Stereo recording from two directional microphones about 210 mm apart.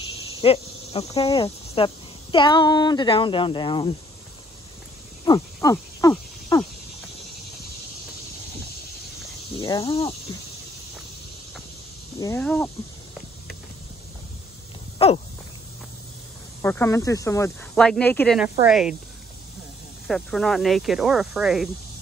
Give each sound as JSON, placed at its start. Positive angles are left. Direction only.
{"t": 0.4, "sound": "speech", "side_deg": 25}
{"t": 5.2, "sound": "cricket", "side_deg": 15}
{"t": 9.6, "sound": "speech", "side_deg": 15}
{"t": 12.2, "sound": "speech", "side_deg": 10}
{"t": 15.0, "sound": "speech", "side_deg": 30}
{"t": 16.6, "sound": "speech", "side_deg": 10}
{"t": 17.7, "sound": "speech", "side_deg": 5}
{"t": 20.1, "sound": "speech", "side_deg": 0}